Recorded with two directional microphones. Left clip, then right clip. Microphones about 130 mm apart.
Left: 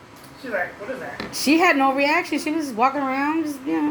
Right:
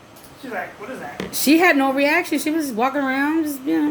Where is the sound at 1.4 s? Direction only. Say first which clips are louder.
Right 2 dB; 20° right (ahead or behind).